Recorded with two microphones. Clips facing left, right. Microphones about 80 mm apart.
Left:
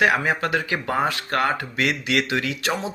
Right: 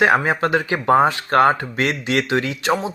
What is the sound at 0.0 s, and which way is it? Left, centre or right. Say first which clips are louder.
Speech: right 4 dB; right.